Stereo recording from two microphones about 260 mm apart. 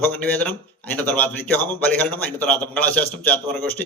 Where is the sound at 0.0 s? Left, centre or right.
Centre.